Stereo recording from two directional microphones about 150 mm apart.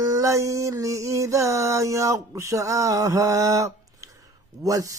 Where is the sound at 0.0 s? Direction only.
20° right (ahead or behind).